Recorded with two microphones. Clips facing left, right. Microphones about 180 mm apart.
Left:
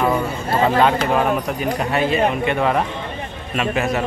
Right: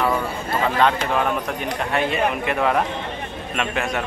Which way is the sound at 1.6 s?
5° left (ahead or behind).